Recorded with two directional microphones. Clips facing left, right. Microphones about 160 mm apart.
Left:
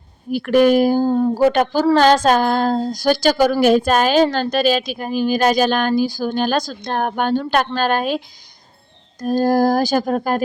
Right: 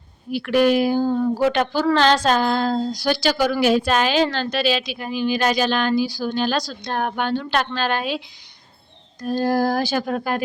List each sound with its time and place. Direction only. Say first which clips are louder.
0.3 s speech: left 4 dB; 45° left (ahead or behind)
9.2 s speech: left 4 dB; 45° left (ahead or behind)